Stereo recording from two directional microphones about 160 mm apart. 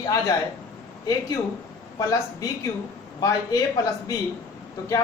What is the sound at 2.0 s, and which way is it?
Speech, 20° left (ahead or behind).